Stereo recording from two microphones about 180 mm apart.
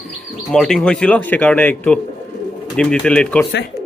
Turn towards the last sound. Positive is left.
turn(degrees=5)  # may be behind; listen again after turning